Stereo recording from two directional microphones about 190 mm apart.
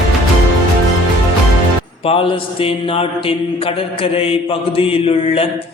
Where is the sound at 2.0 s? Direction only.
30° left (ahead or behind).